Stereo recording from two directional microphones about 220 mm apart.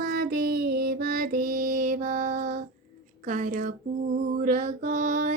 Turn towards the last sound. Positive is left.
turn(degrees=-35)  # may be behind; listen again after turning